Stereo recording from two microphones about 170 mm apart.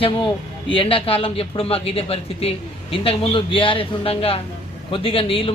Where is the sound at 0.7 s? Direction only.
30° left (ahead or behind).